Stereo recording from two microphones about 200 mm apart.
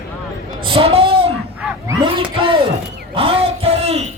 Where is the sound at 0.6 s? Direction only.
25° right (ahead or behind).